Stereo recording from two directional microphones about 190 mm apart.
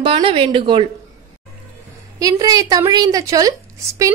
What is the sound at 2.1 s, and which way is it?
A woman's voice, 20° right (ahead or behind).